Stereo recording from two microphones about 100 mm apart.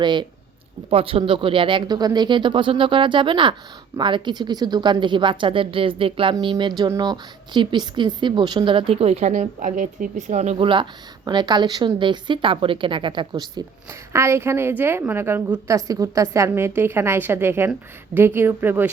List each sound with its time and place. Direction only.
0.0 s speech: 50° right (ahead or behind)
0.9 s speech: 65° right (ahead or behind)
2.0 s speech: 45° right (ahead or behind); by 6.3 s 65° right (ahead or behind)
6.4 s speech: 50° right (ahead or behind); by 9.1 s 75° right (ahead or behind)
10.5 s speech: 60° right (ahead or behind)
11.3 s speech: 50° right (ahead or behind)
14.1 s a woman's voice: 30° right (ahead or behind)
15.6 s a woman's voice: 35° right (ahead or behind)